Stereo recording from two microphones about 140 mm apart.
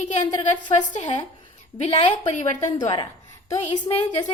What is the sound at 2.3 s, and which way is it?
Speech, 60° left (ahead or behind).